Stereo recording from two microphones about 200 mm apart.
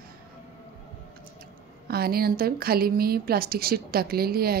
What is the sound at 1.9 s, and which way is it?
A woman's voice, 50° right (ahead or behind).